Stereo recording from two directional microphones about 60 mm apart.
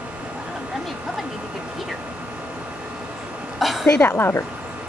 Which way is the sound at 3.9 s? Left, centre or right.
Left.